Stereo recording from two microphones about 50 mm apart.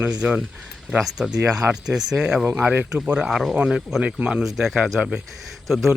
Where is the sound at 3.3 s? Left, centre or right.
Centre.